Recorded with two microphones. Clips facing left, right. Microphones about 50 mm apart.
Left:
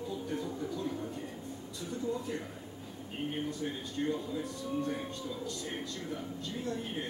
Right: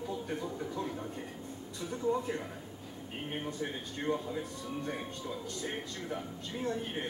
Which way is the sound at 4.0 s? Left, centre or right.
Right.